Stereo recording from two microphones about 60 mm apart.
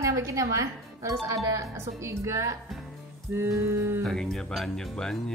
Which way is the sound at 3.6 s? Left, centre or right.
Right.